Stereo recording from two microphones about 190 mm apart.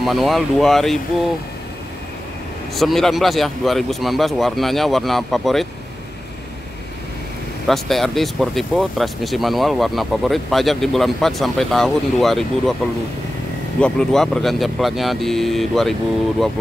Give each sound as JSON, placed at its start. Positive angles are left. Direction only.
{"t": 0.0, "sound": "speech", "side_deg": 0}
{"t": 2.7, "sound": "speech", "side_deg": 0}
{"t": 7.6, "sound": "speech", "side_deg": 0}
{"t": 13.7, "sound": "speech", "side_deg": 5}